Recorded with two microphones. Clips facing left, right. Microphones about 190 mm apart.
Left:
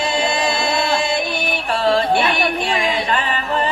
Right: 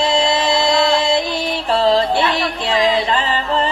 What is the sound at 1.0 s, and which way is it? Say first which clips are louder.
Music: right 3 dB; 25° right (ahead or behind).